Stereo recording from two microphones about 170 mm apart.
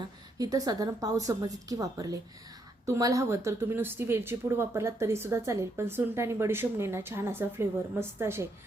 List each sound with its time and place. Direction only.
0.3 s a woman's voice: 20° right (ahead or behind)